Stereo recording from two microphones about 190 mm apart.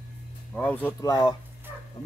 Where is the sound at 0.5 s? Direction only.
10° left (ahead or behind).